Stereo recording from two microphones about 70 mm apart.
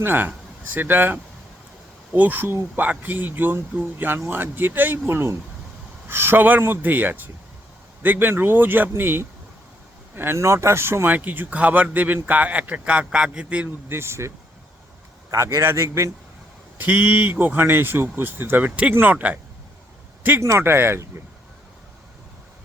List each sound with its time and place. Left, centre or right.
0.0 s speech: right
11.1 s speech: right
13.8 s a man's voice: right
16.7 s speech: right
20.6 s speech: right